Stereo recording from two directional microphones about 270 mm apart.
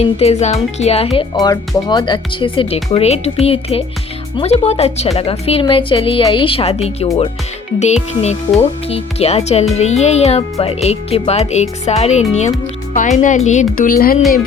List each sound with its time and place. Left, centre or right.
0.0 s speech: left